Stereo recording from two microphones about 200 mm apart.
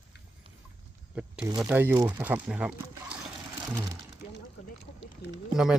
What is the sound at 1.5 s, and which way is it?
Speech, 10° right (ahead or behind).